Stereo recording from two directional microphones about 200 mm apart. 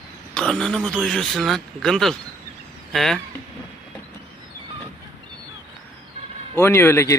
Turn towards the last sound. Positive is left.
turn(degrees=15)  # may be behind; listen again after turning